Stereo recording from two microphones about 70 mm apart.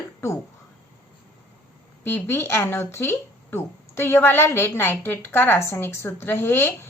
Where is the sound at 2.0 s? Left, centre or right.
Left.